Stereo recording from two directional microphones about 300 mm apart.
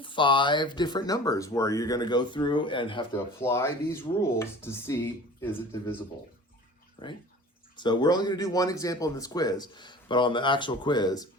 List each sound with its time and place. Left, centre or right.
0.0 s speech: centre
7.0 s speech: centre